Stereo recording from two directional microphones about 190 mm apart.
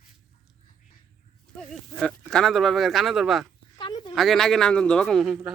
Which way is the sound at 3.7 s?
25° left (ahead or behind).